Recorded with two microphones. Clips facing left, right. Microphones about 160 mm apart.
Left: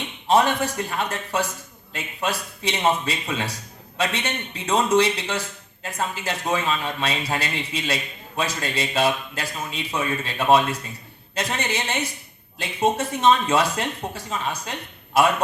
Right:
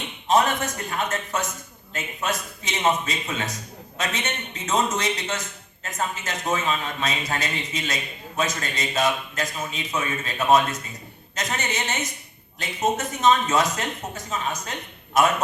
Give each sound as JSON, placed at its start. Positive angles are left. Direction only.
{"t": 0.3, "sound": "speech", "side_deg": 30}